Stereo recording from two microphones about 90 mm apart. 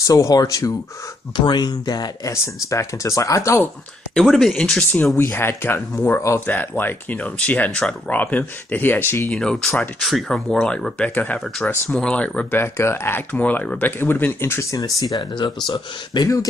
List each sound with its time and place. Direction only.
0.0 s speech: 40° left (ahead or behind)
1.3 s speech: 60° left (ahead or behind)
2.4 s speech: 35° left (ahead or behind)
4.1 s speech: 5° left (ahead or behind)
5.1 s speech: 25° left (ahead or behind)
9.3 s speech: 10° left (ahead or behind)
12.5 s speech: 30° left (ahead or behind); by 16.3 s 55° left (ahead or behind)